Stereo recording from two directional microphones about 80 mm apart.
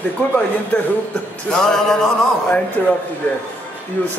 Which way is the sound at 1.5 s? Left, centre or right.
Centre.